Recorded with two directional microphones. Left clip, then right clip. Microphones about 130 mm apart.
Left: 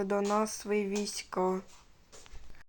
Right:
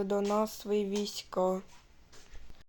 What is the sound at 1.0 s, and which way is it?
Speech, 50° left (ahead or behind).